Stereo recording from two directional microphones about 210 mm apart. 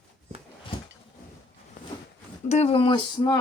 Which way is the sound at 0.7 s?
25° left (ahead or behind).